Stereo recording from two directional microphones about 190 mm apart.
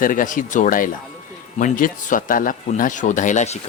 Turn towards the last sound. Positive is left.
turn(degrees=40)  # may be behind; listen again after turning